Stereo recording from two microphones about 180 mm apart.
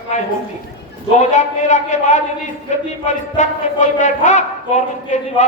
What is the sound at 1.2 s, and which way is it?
A man's voice, 40° left (ahead or behind).